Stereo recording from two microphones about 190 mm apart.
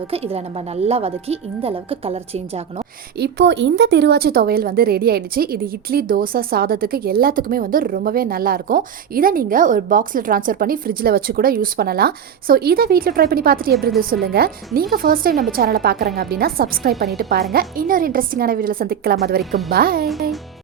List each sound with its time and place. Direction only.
0.1 s a woman's voice: 30° right (ahead or behind)
3.2 s speech: 65° right (ahead or behind)
19.4 s speech: centre (ahead or behind)
19.7 s speech: 50° right (ahead or behind)